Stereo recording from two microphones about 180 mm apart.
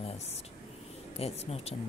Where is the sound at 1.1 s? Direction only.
35° left (ahead or behind).